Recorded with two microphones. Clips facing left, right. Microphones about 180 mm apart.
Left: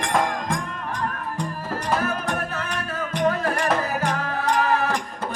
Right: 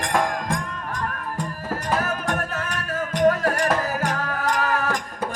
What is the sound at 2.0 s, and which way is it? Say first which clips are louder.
Music: even; 40° right (ahead or behind).